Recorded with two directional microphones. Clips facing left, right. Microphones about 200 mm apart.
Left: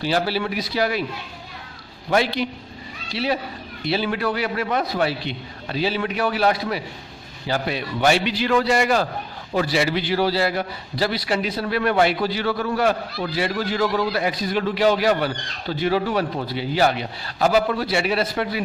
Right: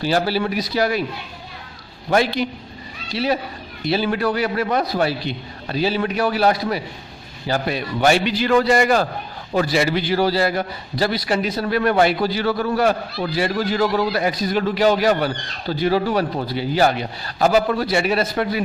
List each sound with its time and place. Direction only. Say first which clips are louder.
0.0 s a man's voice: right 3 dB; 40° right (ahead or behind)
2.0 s a man's voice: right 2 dB; 45° right (ahead or behind)